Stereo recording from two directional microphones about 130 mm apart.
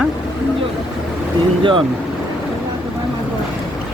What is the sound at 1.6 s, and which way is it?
Speech, 40° right (ahead or behind).